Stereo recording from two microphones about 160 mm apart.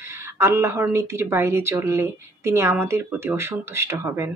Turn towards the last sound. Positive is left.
turn(degrees=-15)  # may be behind; listen again after turning